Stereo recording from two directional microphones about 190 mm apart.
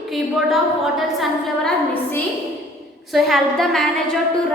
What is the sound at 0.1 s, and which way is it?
A woman's voice, centre (ahead or behind).